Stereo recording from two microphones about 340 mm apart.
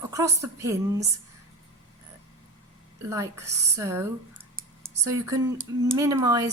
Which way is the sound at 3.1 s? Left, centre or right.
Centre.